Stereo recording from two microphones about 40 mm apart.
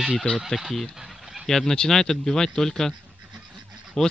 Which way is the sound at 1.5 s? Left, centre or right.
Centre.